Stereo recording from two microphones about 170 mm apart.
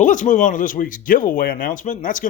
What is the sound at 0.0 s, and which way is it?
Speech, 50° left (ahead or behind).